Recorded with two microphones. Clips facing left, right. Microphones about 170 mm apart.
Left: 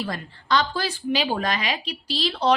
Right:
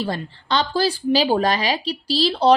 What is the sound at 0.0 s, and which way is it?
A woman's voice, 30° right (ahead or behind).